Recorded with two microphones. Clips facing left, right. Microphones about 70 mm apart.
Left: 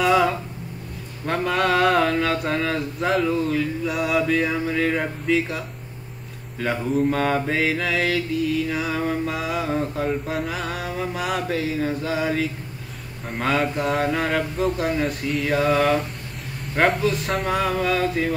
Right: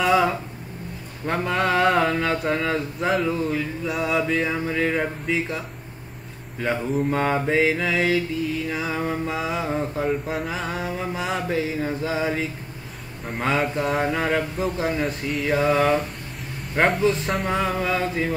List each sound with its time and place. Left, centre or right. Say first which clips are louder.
0.0 s a sound: left 1 dB; centre
1.2 s mantra: left 1 dB; centre
4.1 s speech: left 2 dB; centre
6.6 s speech: left 1 dB; centre
7.1 s mantra: even; centre
8.6 s speech: left 1 dB; centre
9.2 s mantra: left 1 dB; centre
11.4 s mantra: left 1 dB; centre
13.3 s speech: left 1 dB; centre
17.3 s mantra: left 1 dB; centre